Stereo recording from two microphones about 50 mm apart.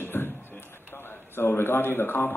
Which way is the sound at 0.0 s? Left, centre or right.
Left.